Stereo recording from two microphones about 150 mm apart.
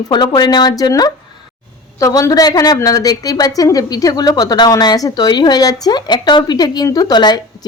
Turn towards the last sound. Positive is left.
turn(degrees=30)  # may be behind; listen again after turning